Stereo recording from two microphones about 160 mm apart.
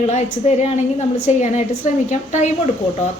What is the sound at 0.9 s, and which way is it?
A woman's voice, 50° left (ahead or behind).